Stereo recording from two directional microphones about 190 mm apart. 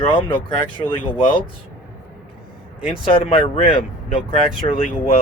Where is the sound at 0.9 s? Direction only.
25° left (ahead or behind).